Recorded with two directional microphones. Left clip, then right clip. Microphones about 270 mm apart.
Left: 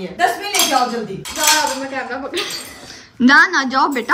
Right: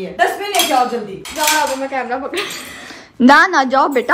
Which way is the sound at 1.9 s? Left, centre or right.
Right.